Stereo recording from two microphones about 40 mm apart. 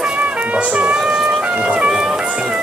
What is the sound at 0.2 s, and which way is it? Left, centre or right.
Music, right.